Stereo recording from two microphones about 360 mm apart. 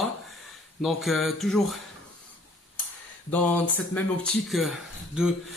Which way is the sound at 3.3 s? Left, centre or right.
Centre.